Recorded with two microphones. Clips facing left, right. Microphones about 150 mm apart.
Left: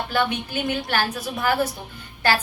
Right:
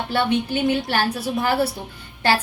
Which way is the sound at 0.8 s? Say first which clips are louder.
Right 2 dB; 25° right (ahead or behind).